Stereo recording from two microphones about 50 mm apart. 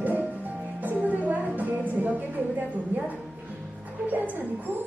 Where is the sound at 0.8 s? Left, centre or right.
Right.